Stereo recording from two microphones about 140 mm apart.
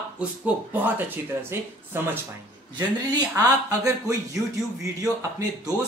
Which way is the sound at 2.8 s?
30° right (ahead or behind).